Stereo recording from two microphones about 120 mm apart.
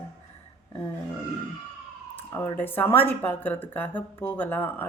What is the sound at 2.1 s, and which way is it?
A woman's voice, 20° left (ahead or behind).